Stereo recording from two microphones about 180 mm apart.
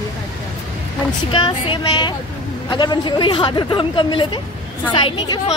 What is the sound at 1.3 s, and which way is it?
A woman's voice, 30° left (ahead or behind).